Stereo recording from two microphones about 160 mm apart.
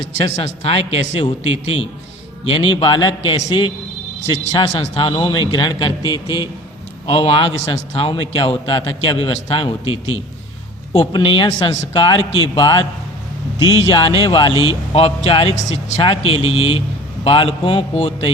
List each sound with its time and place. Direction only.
0.0 s a man's voice: 80° right
0.3 s a man's voice: 40° left (ahead or behind)
2.4 s a man's voice: 35° left (ahead or behind)